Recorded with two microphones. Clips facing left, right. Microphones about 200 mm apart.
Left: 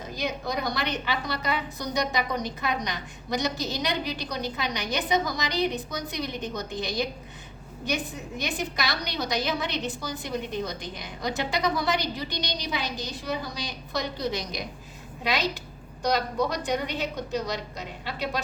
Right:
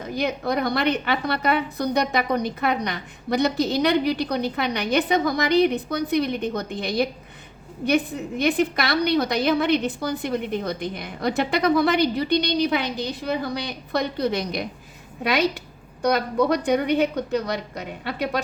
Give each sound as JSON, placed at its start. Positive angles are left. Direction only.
{"t": 0.2, "sound": "a woman's voice", "side_deg": -60}